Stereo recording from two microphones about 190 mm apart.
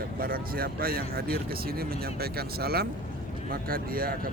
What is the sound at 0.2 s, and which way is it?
Speech, 50° right (ahead or behind).